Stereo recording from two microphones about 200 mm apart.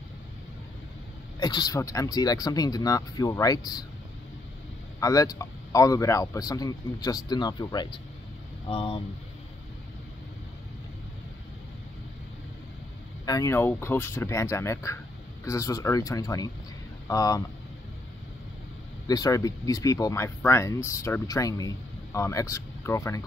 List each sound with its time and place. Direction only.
1.4 s speech: 20° left (ahead or behind)
5.0 s speech: 15° left (ahead or behind)
13.2 s speech: 15° left (ahead or behind)
19.0 s speech: 20° left (ahead or behind)